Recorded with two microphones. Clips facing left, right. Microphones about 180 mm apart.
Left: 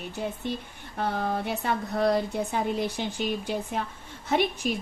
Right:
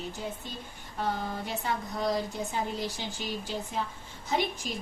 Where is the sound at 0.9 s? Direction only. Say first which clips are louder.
Left 4 dB; 65° left (ahead or behind).